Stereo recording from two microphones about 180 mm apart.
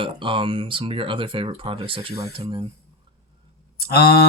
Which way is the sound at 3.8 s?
60° left (ahead or behind).